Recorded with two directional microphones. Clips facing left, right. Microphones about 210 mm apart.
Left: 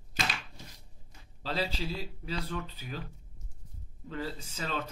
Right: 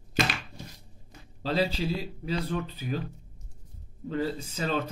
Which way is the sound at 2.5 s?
45° right (ahead or behind).